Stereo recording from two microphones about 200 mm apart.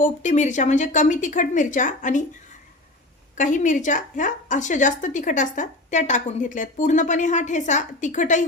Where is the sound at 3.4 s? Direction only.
40° left (ahead or behind).